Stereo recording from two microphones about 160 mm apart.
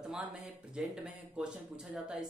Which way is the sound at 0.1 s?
5° right (ahead or behind).